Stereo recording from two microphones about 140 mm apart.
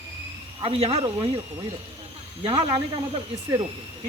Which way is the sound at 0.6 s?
40° right (ahead or behind).